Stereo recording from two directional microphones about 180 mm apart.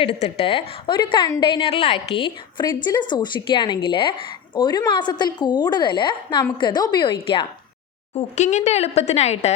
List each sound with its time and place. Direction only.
0.0 s a woman's voice: 35° left (ahead or behind)
8.1 s speech: 40° left (ahead or behind)